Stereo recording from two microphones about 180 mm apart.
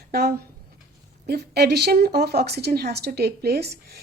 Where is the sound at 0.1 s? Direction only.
60° right (ahead or behind).